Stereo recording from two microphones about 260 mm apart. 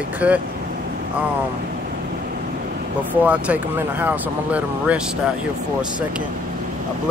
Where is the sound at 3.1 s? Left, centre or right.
Centre.